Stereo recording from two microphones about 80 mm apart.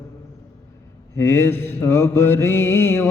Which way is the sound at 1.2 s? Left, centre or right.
Left.